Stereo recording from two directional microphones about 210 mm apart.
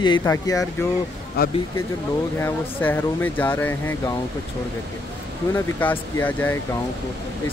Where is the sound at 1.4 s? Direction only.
45° left (ahead or behind).